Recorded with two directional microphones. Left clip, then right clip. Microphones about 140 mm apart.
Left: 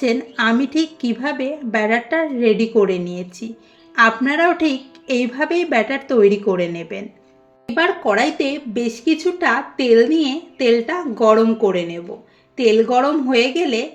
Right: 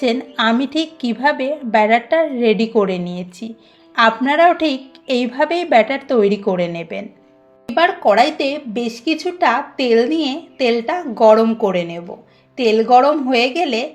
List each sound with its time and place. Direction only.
0.0 s a woman's voice: 30° right (ahead or behind)